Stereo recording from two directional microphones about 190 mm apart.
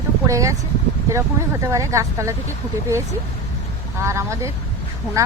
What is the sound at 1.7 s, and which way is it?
Speech, 15° right (ahead or behind).